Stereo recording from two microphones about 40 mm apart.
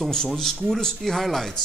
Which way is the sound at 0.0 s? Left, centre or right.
Centre.